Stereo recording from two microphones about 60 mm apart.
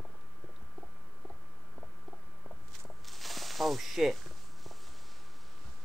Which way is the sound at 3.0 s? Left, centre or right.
Centre.